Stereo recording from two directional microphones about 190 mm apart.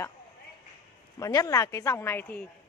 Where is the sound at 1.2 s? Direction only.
15° left (ahead or behind).